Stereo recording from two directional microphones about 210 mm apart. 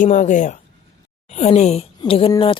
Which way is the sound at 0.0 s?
35° left (ahead or behind).